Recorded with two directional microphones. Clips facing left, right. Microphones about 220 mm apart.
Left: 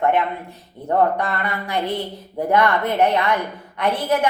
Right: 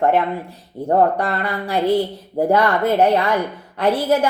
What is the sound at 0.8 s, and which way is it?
A woman's voice, 30° right (ahead or behind).